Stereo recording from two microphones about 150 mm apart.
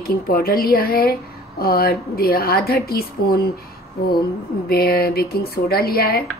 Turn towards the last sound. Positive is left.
turn(degrees=90)